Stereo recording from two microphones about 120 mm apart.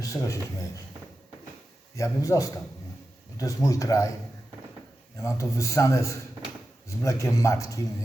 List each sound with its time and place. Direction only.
0.0 s speech: 25° left (ahead or behind)
2.0 s speech: 25° left (ahead or behind)
5.1 s speech: 25° left (ahead or behind)